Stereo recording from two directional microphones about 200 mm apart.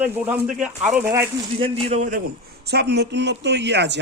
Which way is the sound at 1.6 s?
30° right (ahead or behind).